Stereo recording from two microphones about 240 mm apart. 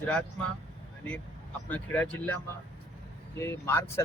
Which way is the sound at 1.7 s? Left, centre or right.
Centre.